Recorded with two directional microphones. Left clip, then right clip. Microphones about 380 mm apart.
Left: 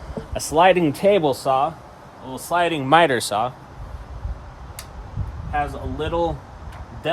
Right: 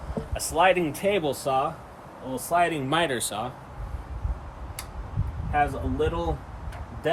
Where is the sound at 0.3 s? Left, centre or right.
Left.